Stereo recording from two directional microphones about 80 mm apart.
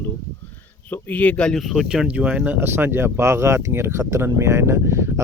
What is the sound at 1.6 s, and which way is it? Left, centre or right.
Speech, centre.